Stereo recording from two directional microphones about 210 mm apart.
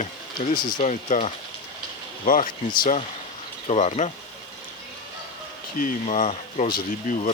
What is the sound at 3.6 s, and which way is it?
Speech, 30° left (ahead or behind).